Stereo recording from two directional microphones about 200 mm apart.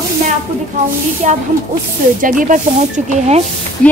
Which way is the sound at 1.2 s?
35° right (ahead or behind).